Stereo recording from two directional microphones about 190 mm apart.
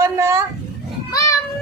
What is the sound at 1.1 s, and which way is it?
Children playing, 15° left (ahead or behind).